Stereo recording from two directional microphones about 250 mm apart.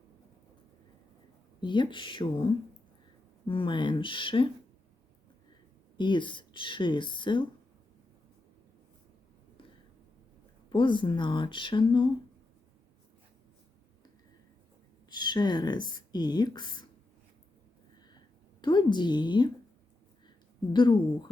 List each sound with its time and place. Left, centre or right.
1.6 s a woman's voice: centre
3.4 s a woman's voice: left
6.0 s a woman's voice: centre
10.7 s a woman's voice: centre
15.1 s a woman's voice: centre
18.6 s a woman's voice: centre
20.7 s a woman's voice: centre